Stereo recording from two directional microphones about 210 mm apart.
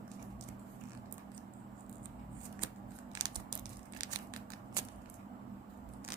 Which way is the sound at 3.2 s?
20° right (ahead or behind).